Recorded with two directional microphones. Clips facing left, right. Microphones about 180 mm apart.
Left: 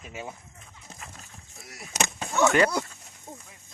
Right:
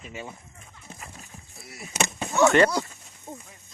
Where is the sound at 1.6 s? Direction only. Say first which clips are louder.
Right 1 dB; centre (ahead or behind).